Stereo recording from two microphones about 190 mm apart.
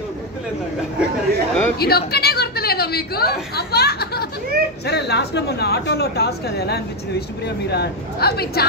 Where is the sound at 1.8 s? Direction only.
55° left (ahead or behind).